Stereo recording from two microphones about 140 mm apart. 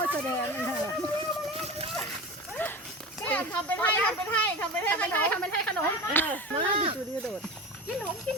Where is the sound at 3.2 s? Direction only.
10° left (ahead or behind).